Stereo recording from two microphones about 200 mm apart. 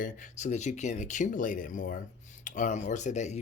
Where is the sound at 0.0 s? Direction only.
35° left (ahead or behind).